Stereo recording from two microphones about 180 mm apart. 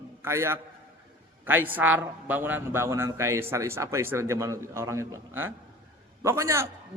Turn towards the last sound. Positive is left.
turn(degrees=-15)  # may be behind; listen again after turning